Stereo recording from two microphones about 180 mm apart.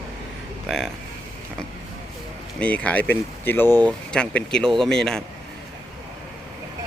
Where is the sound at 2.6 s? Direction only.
5° left (ahead or behind).